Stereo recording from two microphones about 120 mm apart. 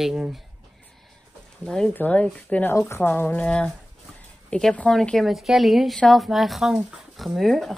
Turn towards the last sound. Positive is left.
turn(degrees=0)  # may be behind; listen again after turning